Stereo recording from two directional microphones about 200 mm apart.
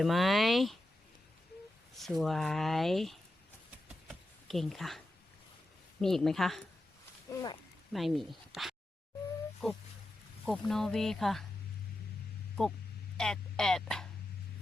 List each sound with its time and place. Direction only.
0.0 s speech: centre (ahead or behind)
2.0 s speech: centre (ahead or behind)
3.8 s a sound: centre (ahead or behind)
6.0 s speech: centre (ahead or behind)
7.3 s speech: 20° left (ahead or behind)
7.9 s speech: centre (ahead or behind)
13.1 s speech: 5° left (ahead or behind)